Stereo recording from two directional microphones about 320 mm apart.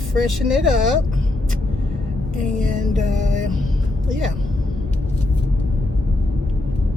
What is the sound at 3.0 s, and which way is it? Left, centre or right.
Music, right.